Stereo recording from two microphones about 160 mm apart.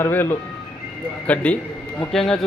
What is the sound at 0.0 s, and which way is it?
Speech, 10° left (ahead or behind).